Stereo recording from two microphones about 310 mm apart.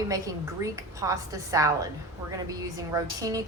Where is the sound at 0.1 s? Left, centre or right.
Centre.